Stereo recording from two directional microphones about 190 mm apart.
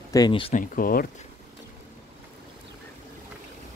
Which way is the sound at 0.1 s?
25° left (ahead or behind).